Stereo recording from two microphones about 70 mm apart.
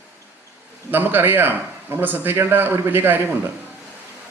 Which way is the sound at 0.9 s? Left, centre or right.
Right.